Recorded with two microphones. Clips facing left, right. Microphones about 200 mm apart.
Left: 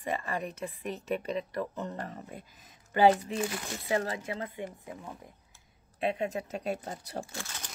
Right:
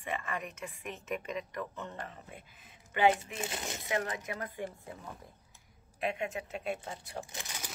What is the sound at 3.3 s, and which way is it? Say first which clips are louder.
Speech: left 5 dB; 25° right (ahead or behind).